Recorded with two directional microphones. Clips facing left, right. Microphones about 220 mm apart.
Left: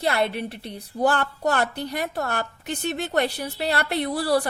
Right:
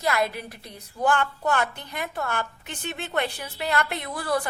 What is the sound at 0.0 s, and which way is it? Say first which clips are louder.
A woman's voice: left 2 dB; 30° left (ahead or behind).